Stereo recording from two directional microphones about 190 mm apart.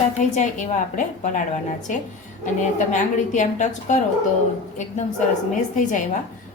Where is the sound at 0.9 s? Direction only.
40° left (ahead or behind).